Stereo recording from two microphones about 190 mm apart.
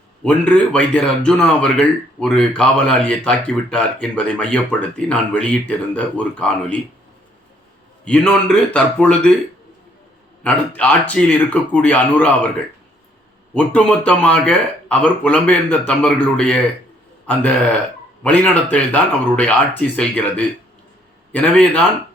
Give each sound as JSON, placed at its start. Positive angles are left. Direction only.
{"t": 0.3, "sound": "speech", "side_deg": 5}
{"t": 8.0, "sound": "a man's voice", "side_deg": 5}
{"t": 10.4, "sound": "speech", "side_deg": 5}
{"t": 13.5, "sound": "speech", "side_deg": 5}